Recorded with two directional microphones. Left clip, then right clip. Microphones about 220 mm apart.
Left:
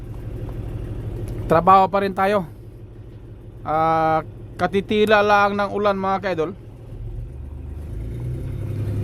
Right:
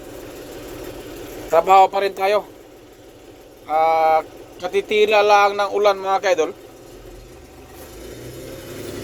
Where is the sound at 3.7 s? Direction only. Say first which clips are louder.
Right 2 dB; 30° left (ahead or behind).